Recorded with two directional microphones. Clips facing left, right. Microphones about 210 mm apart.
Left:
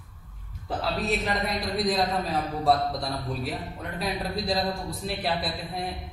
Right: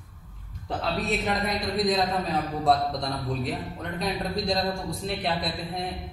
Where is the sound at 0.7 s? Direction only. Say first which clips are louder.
Even; centre (ahead or behind).